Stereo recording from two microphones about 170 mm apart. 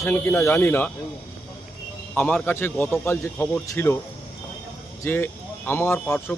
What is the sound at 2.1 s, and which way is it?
A man's voice, 10° left (ahead or behind).